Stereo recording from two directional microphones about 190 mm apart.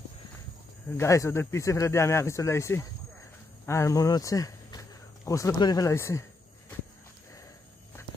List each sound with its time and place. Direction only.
0.8 s speech: 15° left (ahead or behind)